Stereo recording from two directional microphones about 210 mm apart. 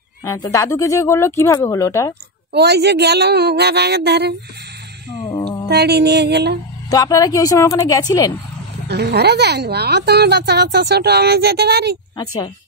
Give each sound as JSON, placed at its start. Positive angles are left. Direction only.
{"t": 0.2, "sound": "speech", "side_deg": 15}
{"t": 2.5, "sound": "speech", "side_deg": -50}
{"t": 5.7, "sound": "speech", "side_deg": -50}
{"t": 6.9, "sound": "speech", "side_deg": 15}
{"t": 8.8, "sound": "speech", "side_deg": -50}